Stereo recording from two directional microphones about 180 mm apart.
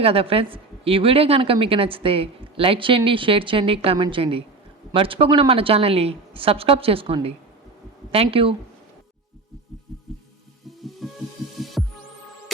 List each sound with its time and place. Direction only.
0.0 s a woman's voice: 30° right (ahead or behind)
11.0 s music: centre (ahead or behind)
11.8 s heart sounds: centre (ahead or behind)